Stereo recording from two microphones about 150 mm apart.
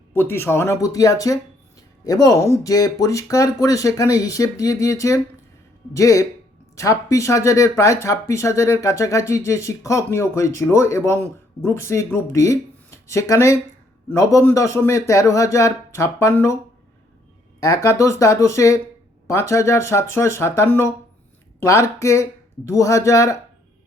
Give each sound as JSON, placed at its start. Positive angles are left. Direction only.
{"t": 0.1, "sound": "speech", "side_deg": 15}
{"t": 17.6, "sound": "speech", "side_deg": 20}